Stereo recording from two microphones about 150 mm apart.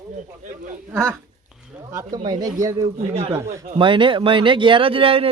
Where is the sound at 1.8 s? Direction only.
20° right (ahead or behind).